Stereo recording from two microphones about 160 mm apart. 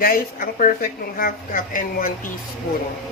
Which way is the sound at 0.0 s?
65° left (ahead or behind).